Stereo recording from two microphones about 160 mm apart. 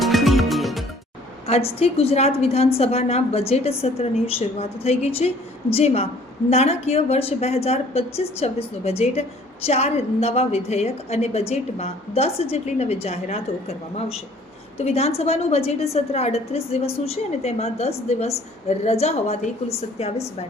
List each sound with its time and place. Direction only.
0.0 s music: centre (ahead or behind)
1.5 s a woman's voice: 40° left (ahead or behind)